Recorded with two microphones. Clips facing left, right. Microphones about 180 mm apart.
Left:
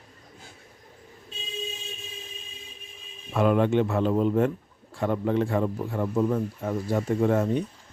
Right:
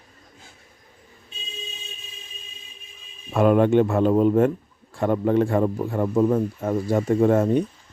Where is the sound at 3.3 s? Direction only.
50° right (ahead or behind).